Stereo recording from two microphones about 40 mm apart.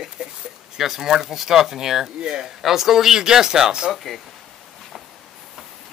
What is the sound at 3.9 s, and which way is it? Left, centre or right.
Speech, centre.